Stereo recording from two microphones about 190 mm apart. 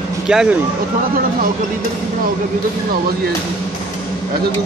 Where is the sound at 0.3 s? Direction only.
5° right (ahead or behind).